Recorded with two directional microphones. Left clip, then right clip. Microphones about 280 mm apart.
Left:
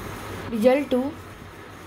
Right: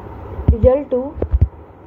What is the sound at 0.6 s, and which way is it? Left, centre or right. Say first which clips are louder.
Speech: right 5 dB; left.